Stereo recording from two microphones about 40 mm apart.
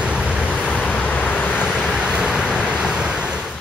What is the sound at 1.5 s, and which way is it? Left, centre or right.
Vehicle, centre.